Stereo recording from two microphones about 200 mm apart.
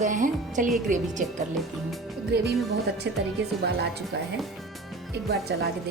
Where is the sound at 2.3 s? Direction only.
55° right (ahead or behind).